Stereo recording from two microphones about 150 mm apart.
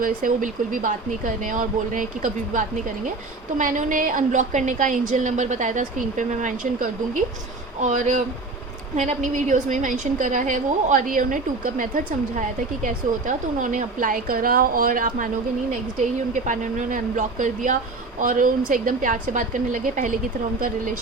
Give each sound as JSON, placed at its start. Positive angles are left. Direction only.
{"t": 0.0, "sound": "a woman's voice", "side_deg": -65}
{"t": 15.7, "sound": "a woman's voice", "side_deg": -55}